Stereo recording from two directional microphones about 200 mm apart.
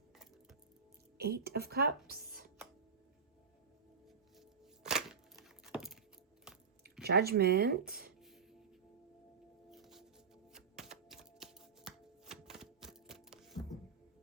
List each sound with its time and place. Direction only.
1.2 s speech: 50° right (ahead or behind)
4.4 s crack: centre (ahead or behind)
6.5 s chewing: 5° right (ahead or behind)
7.0 s speech: 50° right (ahead or behind)
8.2 s music: centre (ahead or behind)
10.8 s a sound: centre (ahead or behind)